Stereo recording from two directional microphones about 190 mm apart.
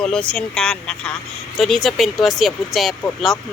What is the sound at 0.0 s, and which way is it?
Speech, 5° left (ahead or behind).